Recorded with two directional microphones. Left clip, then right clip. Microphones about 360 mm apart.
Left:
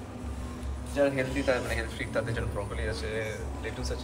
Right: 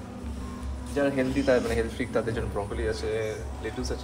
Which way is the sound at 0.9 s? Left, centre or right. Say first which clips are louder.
Right 1 dB; centre.